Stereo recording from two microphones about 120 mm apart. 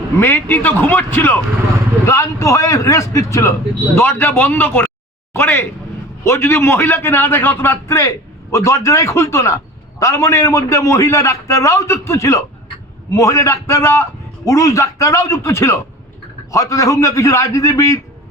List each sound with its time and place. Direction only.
0.2 s a man's voice: 20° left (ahead or behind)